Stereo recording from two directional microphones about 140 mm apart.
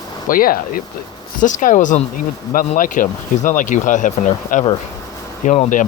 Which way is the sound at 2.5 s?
90° left.